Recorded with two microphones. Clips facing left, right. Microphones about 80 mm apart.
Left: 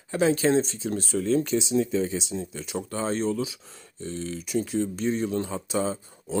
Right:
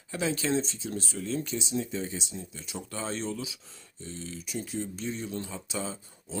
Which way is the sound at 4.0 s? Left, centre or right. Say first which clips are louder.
Left 8 dB; left.